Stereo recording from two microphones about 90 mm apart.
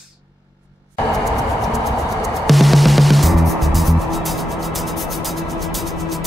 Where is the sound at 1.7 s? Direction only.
Centre (ahead or behind).